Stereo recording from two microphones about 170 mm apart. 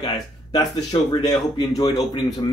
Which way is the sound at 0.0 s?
25° left (ahead or behind).